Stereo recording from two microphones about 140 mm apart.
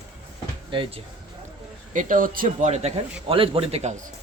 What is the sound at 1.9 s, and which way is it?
Speech, 70° right (ahead or behind).